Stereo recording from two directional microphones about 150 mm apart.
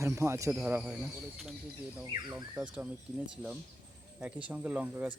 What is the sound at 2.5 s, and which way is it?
Speech, 5° right (ahead or behind).